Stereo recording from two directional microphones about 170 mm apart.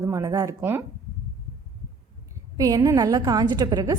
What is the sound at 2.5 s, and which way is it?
A woman's voice, 20° right (ahead or behind).